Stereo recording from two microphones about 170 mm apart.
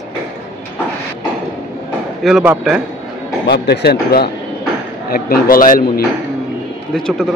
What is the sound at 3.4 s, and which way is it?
Speech, 75° left (ahead or behind).